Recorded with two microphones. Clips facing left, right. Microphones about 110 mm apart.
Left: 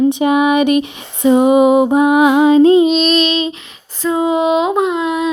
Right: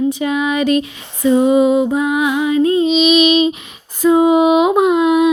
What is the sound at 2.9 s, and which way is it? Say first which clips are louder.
Female singing: right 2 dB; 5° right (ahead or behind).